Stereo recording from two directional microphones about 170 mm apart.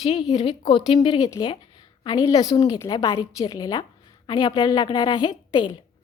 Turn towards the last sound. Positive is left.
turn(degrees=25)  # may be behind; listen again after turning